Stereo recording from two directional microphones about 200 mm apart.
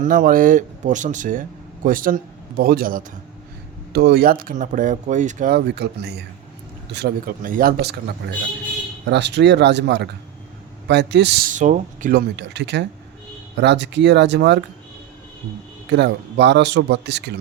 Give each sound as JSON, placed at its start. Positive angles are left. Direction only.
{"t": 0.0, "sound": "speech", "side_deg": -45}
{"t": 15.9, "sound": "speech", "side_deg": -60}